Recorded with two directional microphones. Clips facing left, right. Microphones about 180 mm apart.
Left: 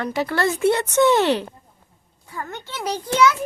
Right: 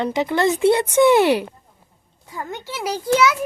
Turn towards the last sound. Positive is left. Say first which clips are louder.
# right 1 dB
turn(degrees=-10)  # may be behind; listen again after turning